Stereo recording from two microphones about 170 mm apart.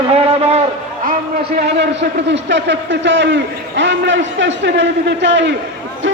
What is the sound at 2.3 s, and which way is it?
A man's voice, 90° right.